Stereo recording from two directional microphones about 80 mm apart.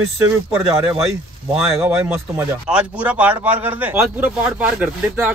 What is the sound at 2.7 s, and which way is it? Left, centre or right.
Speech, centre.